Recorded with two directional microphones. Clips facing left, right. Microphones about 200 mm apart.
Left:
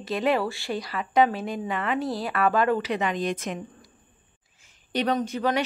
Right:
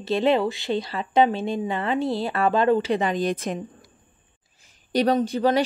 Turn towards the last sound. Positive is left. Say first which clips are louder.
# right 5 dB
turn(degrees=-30)  # may be behind; listen again after turning